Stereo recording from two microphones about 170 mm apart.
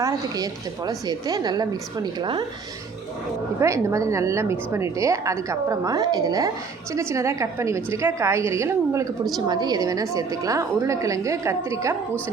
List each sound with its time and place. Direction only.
0.9 s a woman's voice: 20° right (ahead or behind)
3.6 s a woman's voice: 15° right (ahead or behind)